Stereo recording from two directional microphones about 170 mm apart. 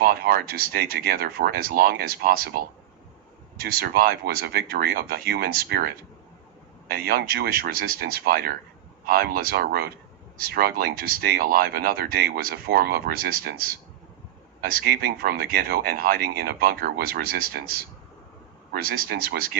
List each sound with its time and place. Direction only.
0.0 s speech: 65° right (ahead or behind)
6.9 s speech: 65° right (ahead or behind)